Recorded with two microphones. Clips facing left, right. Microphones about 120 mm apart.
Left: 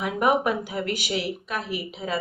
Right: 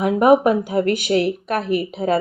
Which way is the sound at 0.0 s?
35° right (ahead or behind).